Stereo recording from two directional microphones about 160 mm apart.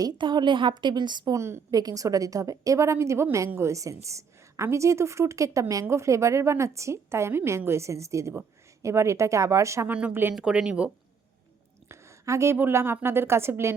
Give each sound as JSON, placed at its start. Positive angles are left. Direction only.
{"t": 0.0, "sound": "a woman's voice", "side_deg": -30}
{"t": 11.9, "sound": "a woman's voice", "side_deg": -20}